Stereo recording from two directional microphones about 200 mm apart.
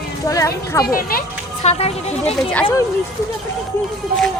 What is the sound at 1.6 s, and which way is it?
Speech, 30° left (ahead or behind).